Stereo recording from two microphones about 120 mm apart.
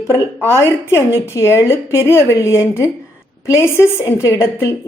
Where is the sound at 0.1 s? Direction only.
20° left (ahead or behind).